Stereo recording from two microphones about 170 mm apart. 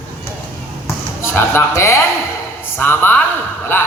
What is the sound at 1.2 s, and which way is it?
A woman's voice, 15° left (ahead or behind).